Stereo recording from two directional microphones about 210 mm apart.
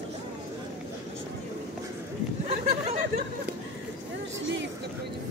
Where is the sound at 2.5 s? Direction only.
30° right (ahead or behind).